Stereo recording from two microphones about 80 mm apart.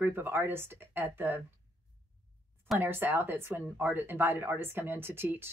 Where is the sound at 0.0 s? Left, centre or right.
Right.